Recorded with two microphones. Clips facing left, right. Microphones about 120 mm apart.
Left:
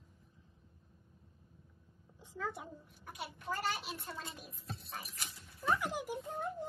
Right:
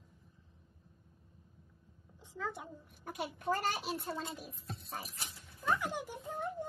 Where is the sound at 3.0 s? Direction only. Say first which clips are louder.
Right 7 dB; 55° right (ahead or behind); by 4.4 s 30° right (ahead or behind).